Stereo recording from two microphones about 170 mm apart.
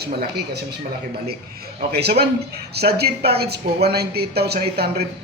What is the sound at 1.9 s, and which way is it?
A man's voice, 70° right (ahead or behind).